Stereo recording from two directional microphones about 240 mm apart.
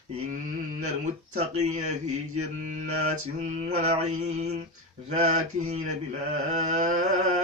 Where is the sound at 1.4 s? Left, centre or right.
Right.